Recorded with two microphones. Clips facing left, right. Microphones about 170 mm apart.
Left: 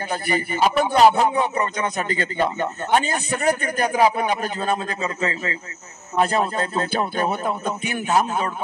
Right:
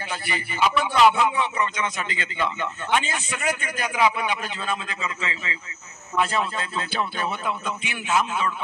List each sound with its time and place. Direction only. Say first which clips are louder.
0.1 s a man's voice: left 9 dB; 45° left (ahead or behind)